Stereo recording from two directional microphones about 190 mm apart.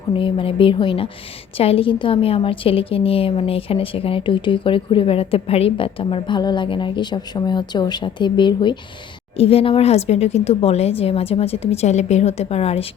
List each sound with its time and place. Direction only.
0.1 s a woman's voice: 25° left (ahead or behind)